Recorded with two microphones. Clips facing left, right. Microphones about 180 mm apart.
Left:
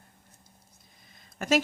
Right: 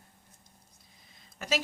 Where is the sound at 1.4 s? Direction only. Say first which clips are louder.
Left 7 dB; 50° left (ahead or behind).